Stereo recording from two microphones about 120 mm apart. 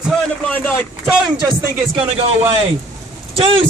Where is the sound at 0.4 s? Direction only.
10° left (ahead or behind).